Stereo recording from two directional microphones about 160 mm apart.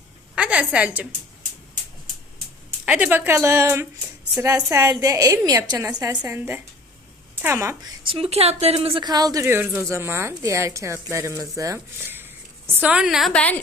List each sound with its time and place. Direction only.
0.3 s a woman's voice: 5° right (ahead or behind)
2.8 s a woman's voice: 10° right (ahead or behind); by 13.6 s 10° left (ahead or behind)